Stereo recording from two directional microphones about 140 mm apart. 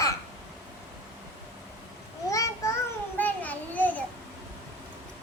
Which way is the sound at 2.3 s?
25° left (ahead or behind).